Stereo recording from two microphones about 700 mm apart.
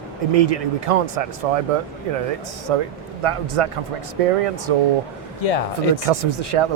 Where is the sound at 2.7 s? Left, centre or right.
Right.